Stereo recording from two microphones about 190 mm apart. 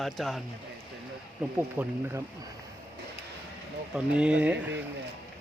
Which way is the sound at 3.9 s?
5° right (ahead or behind).